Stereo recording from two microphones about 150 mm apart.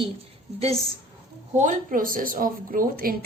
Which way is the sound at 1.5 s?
60° right (ahead or behind).